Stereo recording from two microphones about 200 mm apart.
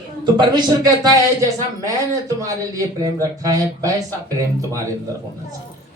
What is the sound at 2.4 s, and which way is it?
Speech, 15° right (ahead or behind).